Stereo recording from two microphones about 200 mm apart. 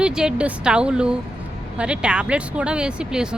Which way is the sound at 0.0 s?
5° right (ahead or behind).